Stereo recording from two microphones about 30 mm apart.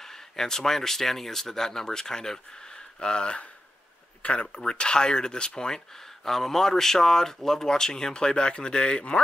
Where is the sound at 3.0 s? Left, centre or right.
Left.